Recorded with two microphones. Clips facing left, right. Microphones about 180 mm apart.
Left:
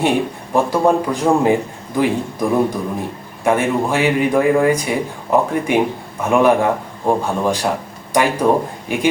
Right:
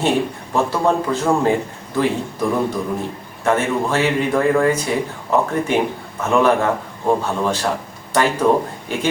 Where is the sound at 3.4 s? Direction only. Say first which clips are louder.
Left 2 dB; 15° left (ahead or behind).